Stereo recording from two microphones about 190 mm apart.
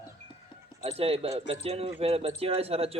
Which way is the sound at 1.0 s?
30° right (ahead or behind).